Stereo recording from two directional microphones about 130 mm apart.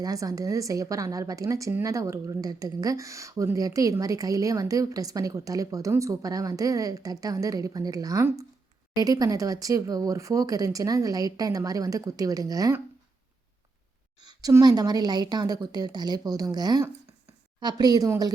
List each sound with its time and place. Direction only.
0.0 s speech: 25° right (ahead or behind)
14.2 s a sound: 30° right (ahead or behind)
14.5 s a woman's voice: 30° right (ahead or behind)